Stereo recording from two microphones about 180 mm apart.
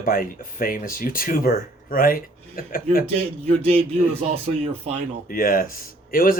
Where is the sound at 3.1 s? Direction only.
35° right (ahead or behind).